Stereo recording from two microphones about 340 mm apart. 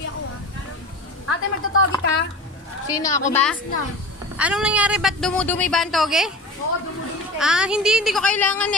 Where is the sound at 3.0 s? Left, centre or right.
Centre.